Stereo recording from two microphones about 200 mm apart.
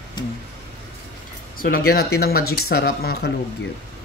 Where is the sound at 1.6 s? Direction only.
50° left (ahead or behind).